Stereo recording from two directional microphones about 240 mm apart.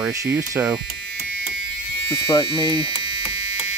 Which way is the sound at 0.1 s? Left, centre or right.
Centre.